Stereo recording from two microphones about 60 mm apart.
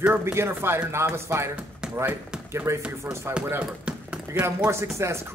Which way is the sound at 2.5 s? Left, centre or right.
Right.